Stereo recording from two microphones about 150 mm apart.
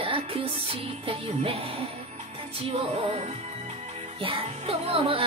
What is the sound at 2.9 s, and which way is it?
Speech, 40° right (ahead or behind).